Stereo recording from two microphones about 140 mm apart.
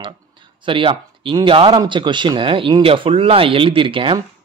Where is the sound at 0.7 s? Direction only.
35° right (ahead or behind).